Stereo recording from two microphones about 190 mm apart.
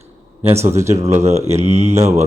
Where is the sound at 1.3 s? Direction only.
35° right (ahead or behind).